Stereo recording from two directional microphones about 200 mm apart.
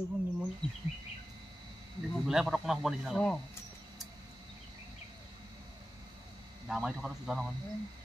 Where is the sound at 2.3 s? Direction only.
Centre (ahead or behind).